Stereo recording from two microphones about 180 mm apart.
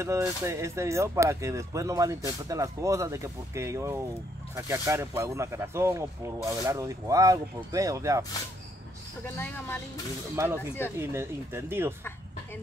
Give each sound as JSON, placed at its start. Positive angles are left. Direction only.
{"t": 0.0, "sound": "speech", "side_deg": -15}
{"t": 9.2, "sound": "speech", "side_deg": 10}
{"t": 10.3, "sound": "speech", "side_deg": -15}